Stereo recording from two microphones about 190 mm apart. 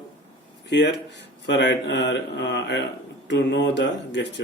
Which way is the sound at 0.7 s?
65° left (ahead or behind).